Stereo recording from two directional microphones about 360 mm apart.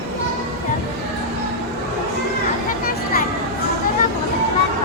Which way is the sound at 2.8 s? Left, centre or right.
Left.